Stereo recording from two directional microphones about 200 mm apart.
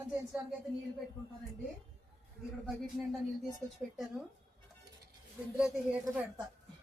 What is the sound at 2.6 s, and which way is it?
Speech, centre (ahead or behind).